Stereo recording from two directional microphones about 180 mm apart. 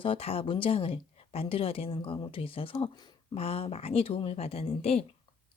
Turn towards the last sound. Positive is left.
turn(degrees=35)  # may be behind; listen again after turning